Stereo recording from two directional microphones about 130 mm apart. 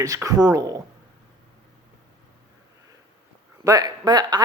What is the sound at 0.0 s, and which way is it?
Speech, 25° right (ahead or behind).